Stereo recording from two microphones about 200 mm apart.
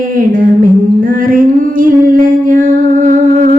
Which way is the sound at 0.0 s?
45° right (ahead or behind).